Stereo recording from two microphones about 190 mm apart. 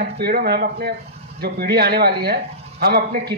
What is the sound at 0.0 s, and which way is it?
Speech, 55° right (ahead or behind).